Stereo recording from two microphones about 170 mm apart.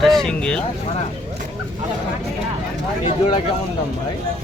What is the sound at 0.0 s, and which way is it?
Speech, centre (ahead or behind).